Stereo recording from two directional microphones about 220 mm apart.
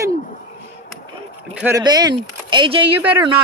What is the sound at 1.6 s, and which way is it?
Speech, 15° right (ahead or behind).